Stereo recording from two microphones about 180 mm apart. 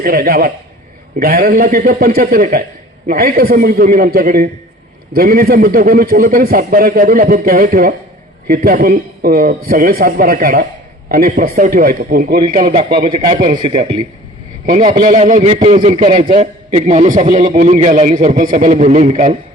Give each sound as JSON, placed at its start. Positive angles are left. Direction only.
{"t": 0.0, "sound": "a man's voice", "side_deg": -55}
{"t": 12.5, "sound": "a man's voice", "side_deg": -40}
{"t": 14.7, "sound": "a man's voice", "side_deg": -45}